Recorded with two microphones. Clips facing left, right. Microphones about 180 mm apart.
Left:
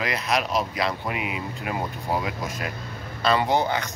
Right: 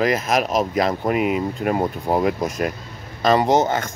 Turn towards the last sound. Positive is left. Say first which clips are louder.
# right 5 dB
turn(degrees=-45)  # may be behind; listen again after turning